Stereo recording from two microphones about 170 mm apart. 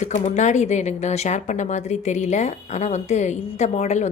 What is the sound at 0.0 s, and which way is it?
Speech, 45° left (ahead or behind).